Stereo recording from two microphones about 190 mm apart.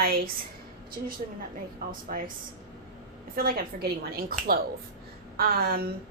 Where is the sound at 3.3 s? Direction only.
50° right (ahead or behind).